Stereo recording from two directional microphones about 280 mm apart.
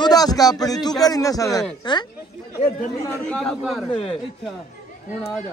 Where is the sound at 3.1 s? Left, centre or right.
Centre.